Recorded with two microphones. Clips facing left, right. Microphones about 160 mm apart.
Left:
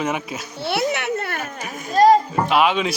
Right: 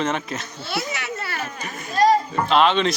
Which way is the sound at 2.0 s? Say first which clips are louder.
Left 4 dB; 40° left (ahead or behind).